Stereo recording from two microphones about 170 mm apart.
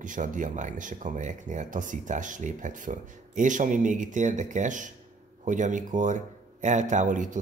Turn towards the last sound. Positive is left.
turn(degrees=-50)  # may be behind; listen again after turning